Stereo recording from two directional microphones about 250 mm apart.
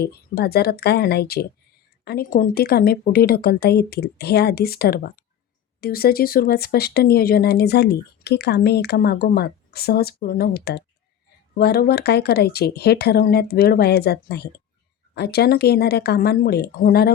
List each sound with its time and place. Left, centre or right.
0.0 s speech: left